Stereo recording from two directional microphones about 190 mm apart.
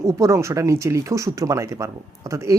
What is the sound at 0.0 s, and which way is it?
Speech, 15° right (ahead or behind).